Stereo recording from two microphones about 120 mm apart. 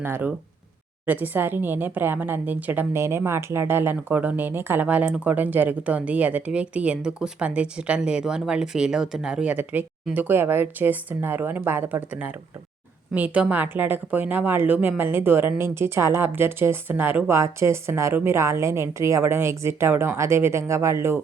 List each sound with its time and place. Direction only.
0.0 s a woman's voice: 15° right (ahead or behind)